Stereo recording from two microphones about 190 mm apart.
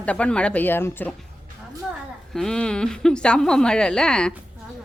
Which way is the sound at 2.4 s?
5° left (ahead or behind).